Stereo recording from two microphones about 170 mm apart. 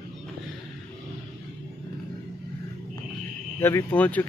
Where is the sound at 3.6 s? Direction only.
15° left (ahead or behind).